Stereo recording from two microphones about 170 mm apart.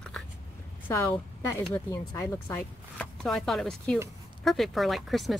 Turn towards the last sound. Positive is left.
turn(degrees=0)  # may be behind; listen again after turning